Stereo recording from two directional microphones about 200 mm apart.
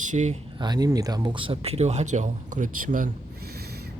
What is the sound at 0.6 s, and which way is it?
Speech, 20° right (ahead or behind).